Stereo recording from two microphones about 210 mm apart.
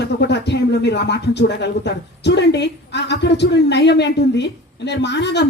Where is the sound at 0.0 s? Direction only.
55° left (ahead or behind).